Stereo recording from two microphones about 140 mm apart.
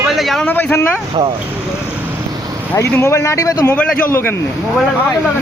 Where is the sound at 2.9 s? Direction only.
20° left (ahead or behind).